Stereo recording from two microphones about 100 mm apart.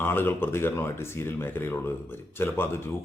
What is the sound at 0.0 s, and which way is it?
A man's voice, 20° left (ahead or behind).